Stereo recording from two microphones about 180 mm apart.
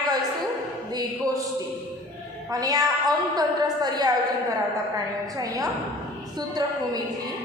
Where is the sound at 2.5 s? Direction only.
20° right (ahead or behind).